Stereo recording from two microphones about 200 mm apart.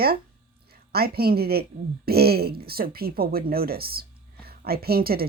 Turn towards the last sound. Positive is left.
turn(degrees=-50)  # may be behind; listen again after turning